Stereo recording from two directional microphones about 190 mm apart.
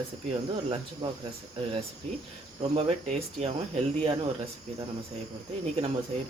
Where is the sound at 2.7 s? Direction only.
35° right (ahead or behind).